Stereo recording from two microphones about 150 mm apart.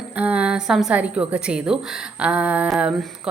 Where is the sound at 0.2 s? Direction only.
10° right (ahead or behind).